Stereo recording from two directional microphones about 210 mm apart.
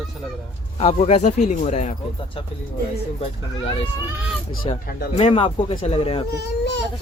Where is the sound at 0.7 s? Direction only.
30° left (ahead or behind).